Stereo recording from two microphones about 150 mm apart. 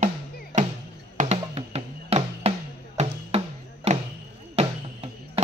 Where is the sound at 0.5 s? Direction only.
55° right (ahead or behind).